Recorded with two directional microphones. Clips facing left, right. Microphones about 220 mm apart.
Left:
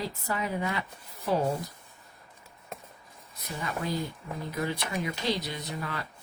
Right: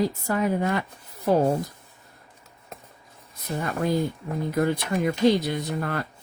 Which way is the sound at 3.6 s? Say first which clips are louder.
Right 7 dB; 55° right (ahead or behind).